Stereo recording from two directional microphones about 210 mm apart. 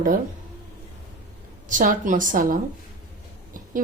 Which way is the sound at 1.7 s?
40° right (ahead or behind).